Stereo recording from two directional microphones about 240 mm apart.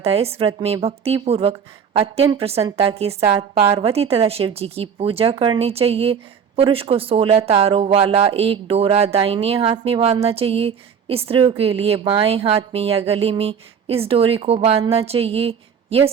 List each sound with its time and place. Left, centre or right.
0.0 s a woman's voice: right